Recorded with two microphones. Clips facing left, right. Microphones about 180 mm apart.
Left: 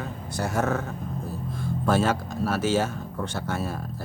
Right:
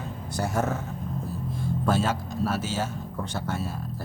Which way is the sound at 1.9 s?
70° left (ahead or behind).